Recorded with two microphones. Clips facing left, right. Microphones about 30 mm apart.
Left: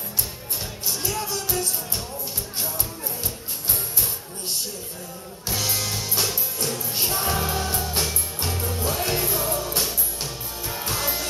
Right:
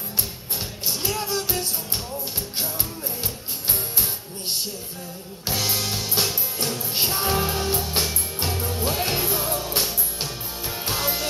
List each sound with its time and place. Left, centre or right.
0.8 s music: right
5.5 s music: centre
8.8 s music: right